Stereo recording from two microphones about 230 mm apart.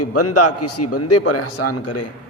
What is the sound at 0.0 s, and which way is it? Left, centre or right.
A man's voice, left.